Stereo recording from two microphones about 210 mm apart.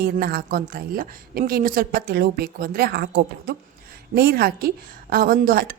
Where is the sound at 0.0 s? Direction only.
45° right (ahead or behind).